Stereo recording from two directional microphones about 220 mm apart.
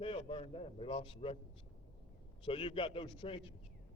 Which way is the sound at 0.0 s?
25° left (ahead or behind).